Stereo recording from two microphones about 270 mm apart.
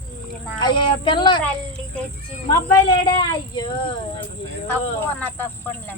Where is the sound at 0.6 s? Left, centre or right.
Centre.